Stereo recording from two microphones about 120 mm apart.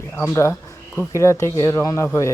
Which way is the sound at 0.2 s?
25° left (ahead or behind).